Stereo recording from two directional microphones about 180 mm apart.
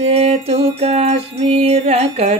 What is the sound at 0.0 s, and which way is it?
Music, 35° right (ahead or behind).